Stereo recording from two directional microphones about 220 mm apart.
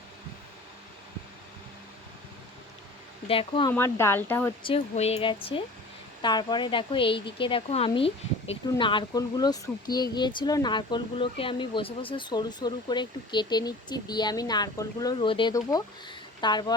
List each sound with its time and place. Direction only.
3.2 s a woman's voice: 25° left (ahead or behind)
3.7 s speech: 10° left (ahead or behind)
4.6 s a woman's voice: 25° left (ahead or behind)